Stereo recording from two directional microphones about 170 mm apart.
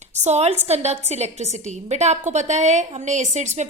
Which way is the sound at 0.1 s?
40° right (ahead or behind).